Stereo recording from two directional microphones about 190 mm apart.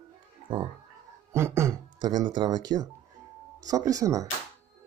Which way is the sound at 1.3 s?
15° right (ahead or behind).